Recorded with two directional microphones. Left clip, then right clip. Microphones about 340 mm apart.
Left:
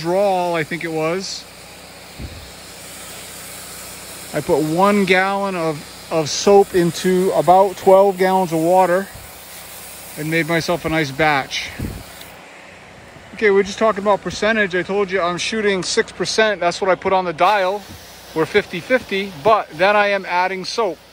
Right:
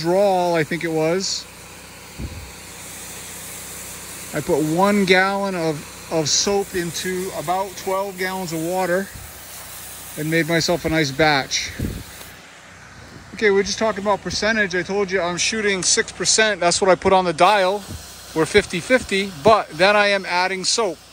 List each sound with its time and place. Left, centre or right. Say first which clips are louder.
0.0 s speech: even; centre
4.3 s speech: left 3 dB; centre
7.2 s speech: left 14 dB; right
8.7 s speech: left 6 dB; centre
10.1 s speech: left 1 dB; centre
13.4 s speech: left 3 dB; centre